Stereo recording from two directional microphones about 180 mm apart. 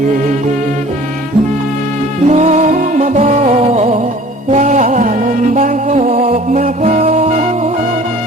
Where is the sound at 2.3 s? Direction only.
40° right (ahead or behind).